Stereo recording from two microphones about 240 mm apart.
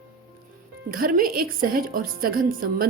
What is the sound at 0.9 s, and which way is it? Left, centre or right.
A woman's voice, right.